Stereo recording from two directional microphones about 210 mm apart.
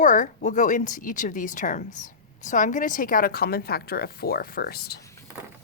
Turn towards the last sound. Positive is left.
turn(degrees=50)  # may be behind; listen again after turning